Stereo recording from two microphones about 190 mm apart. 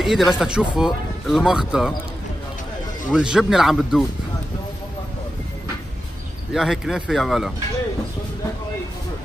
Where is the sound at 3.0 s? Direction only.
5° right (ahead or behind).